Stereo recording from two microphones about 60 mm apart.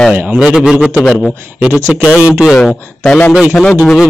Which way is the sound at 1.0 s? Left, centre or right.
Centre.